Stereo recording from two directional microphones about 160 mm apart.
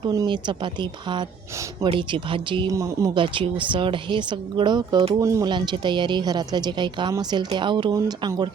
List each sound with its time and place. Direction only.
0.1 s a woman's voice: 25° right (ahead or behind)